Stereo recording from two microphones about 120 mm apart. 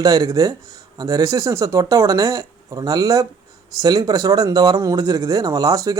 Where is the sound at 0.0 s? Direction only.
30° right (ahead or behind).